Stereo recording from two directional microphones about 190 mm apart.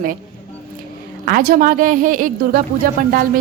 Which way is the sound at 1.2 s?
50° right (ahead or behind).